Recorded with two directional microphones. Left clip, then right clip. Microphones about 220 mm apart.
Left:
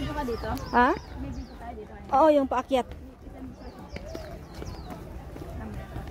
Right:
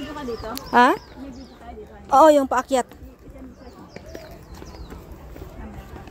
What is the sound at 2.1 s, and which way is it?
Speech, 30° right (ahead or behind).